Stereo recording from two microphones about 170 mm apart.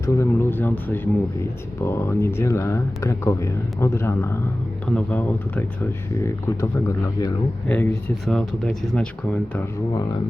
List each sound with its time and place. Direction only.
0.0 s speech: 15° left (ahead or behind)
9.9 s speech: 20° left (ahead or behind)